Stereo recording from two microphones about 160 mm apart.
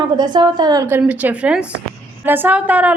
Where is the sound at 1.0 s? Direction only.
10° right (ahead or behind).